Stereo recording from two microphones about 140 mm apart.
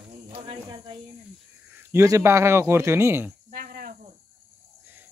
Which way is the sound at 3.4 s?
90° right.